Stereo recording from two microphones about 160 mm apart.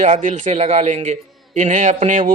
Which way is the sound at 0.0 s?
50° right (ahead or behind).